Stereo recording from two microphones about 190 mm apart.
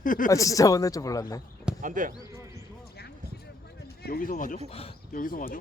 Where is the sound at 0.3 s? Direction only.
15° left (ahead or behind).